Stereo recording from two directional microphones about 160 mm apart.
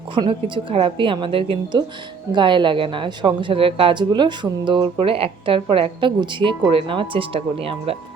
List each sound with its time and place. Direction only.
0.1 s a woman's voice: 30° right (ahead or behind)